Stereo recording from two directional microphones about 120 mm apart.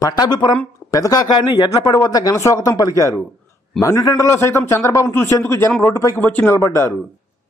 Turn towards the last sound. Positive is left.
turn(degrees=20)  # may be behind; listen again after turning